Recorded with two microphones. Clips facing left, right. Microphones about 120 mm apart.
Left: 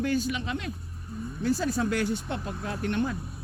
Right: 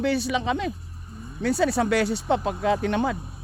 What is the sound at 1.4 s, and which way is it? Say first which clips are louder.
Speech: right 5 dB; 75° right (ahead or behind).